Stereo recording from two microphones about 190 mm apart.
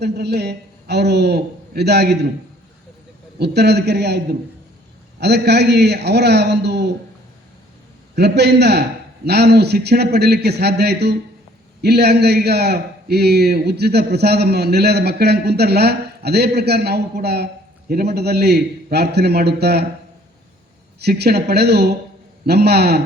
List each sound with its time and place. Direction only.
0.0 s a man's voice: 60° right (ahead or behind)
3.3 s a man's voice: 60° right (ahead or behind)
5.2 s a man's voice: 60° right (ahead or behind)
8.1 s a man's voice: 60° right (ahead or behind)
21.0 s a man's voice: 60° right (ahead or behind)